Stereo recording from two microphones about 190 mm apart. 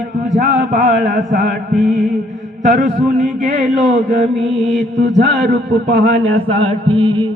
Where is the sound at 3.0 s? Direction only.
40° right (ahead or behind).